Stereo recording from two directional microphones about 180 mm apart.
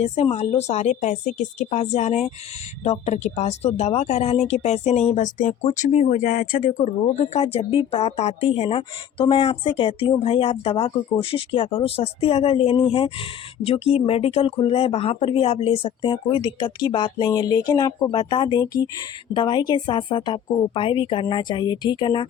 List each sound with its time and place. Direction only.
0.0 s speech: 35° left (ahead or behind)